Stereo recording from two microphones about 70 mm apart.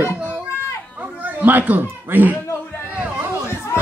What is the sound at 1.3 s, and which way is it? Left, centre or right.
Speech, right.